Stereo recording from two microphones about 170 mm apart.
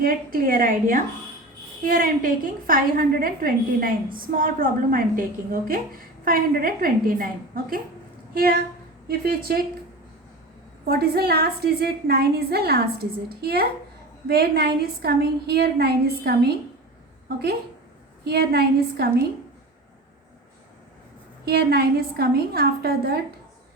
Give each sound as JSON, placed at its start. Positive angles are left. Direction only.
{"t": 0.0, "sound": "a woman's voice", "side_deg": -60}
{"t": 10.8, "sound": "a woman's voice", "side_deg": -65}
{"t": 21.4, "sound": "a woman's voice", "side_deg": -65}